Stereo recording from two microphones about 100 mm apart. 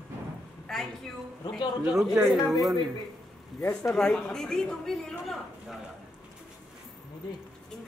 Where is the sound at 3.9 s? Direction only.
5° left (ahead or behind).